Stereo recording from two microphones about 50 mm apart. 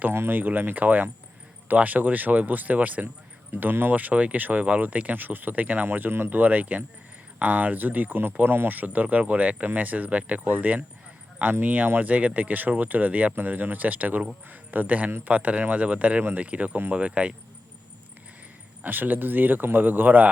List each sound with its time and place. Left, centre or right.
0.1 s speech: right
3.9 s speech: right
18.8 s speech: right